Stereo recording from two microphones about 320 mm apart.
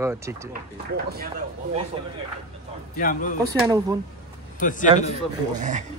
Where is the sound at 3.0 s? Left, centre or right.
Left.